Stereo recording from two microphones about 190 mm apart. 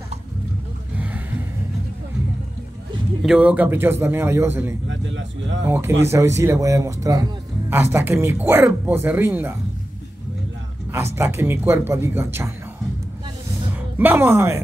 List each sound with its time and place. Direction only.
0.9 s a sound: 5° right (ahead or behind)
3.2 s speech: 5° right (ahead or behind)
4.8 s speech: 75° right (ahead or behind)
5.7 s speech: 10° right (ahead or behind)
11.1 s speech: 15° right (ahead or behind)
13.9 s speech: 10° right (ahead or behind)